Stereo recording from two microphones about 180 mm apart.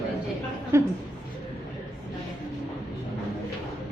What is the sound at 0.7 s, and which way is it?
Speech, 15° right (ahead or behind).